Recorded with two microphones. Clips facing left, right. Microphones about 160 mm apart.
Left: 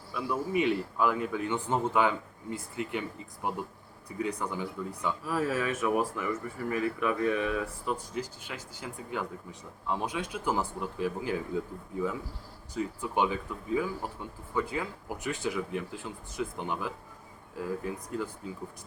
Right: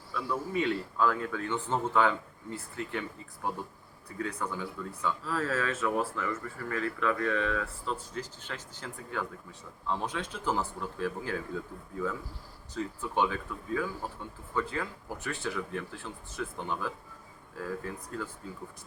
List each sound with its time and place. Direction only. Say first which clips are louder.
0.1 s speech: left 2 dB; 15° left (ahead or behind)